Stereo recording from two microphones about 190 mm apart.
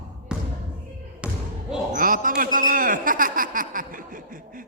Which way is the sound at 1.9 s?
45° right (ahead or behind).